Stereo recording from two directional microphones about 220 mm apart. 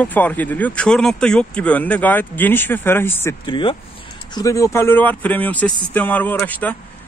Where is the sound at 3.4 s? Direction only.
20° left (ahead or behind).